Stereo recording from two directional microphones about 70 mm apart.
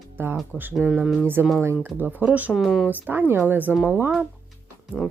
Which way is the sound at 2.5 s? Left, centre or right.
Centre.